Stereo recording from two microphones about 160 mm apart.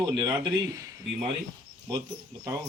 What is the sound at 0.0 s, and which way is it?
Speech, 25° right (ahead or behind).